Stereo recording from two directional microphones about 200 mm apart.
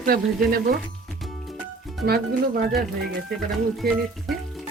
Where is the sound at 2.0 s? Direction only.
50° right (ahead or behind).